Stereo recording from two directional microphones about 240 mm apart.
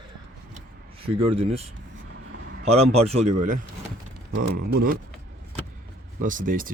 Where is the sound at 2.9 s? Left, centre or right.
Right.